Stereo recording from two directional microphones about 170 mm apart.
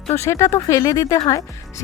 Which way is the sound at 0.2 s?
15° left (ahead or behind).